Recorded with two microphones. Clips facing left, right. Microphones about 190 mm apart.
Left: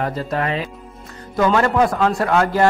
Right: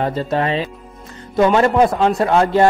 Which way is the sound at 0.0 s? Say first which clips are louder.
Right 3 dB; 25° right (ahead or behind).